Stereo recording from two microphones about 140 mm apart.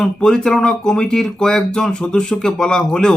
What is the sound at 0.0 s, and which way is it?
Speech, 5° left (ahead or behind).